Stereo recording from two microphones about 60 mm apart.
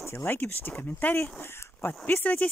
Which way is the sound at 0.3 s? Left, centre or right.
Left.